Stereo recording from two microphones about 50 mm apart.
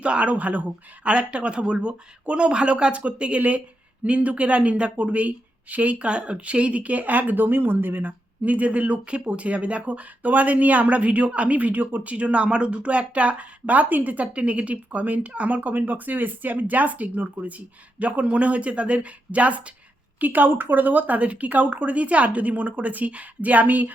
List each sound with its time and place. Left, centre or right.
0.0 s speech: right